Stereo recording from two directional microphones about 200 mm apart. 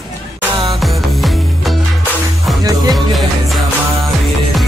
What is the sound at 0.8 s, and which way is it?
Music, centre (ahead or behind).